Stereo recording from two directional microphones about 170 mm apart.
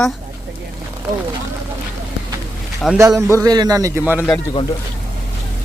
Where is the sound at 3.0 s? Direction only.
15° right (ahead or behind).